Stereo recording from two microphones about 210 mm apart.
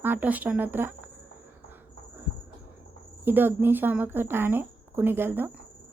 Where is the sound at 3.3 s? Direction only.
10° right (ahead or behind).